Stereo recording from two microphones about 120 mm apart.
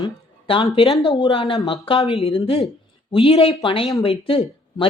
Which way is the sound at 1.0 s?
45° left (ahead or behind).